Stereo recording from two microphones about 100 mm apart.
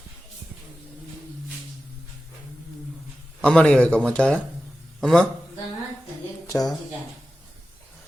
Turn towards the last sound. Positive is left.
turn(degrees=40)  # may be behind; listen again after turning